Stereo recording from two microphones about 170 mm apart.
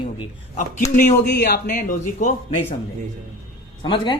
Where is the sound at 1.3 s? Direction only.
65° left (ahead or behind).